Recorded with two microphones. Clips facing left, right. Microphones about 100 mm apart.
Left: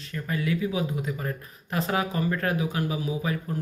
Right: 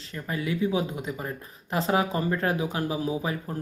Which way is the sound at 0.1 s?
25° right (ahead or behind).